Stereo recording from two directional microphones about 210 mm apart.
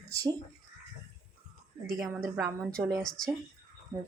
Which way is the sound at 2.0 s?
Centre (ahead or behind).